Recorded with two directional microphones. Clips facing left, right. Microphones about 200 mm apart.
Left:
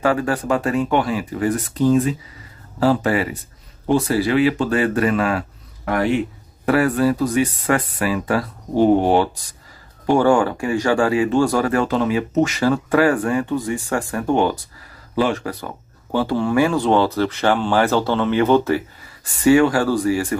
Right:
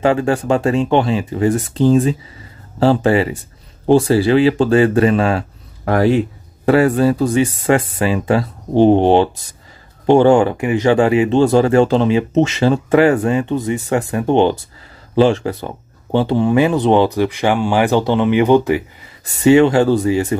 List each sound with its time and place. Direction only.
0.0 s speech: 25° right (ahead or behind)